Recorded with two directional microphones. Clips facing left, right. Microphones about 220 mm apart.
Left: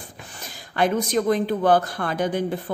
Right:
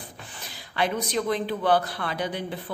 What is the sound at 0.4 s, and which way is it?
Speech, 45° left (ahead or behind).